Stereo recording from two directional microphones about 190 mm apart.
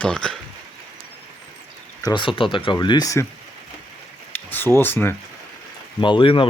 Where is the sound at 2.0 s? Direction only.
20° left (ahead or behind).